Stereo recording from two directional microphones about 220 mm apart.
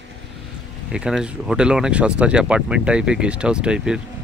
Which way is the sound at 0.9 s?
5° right (ahead or behind).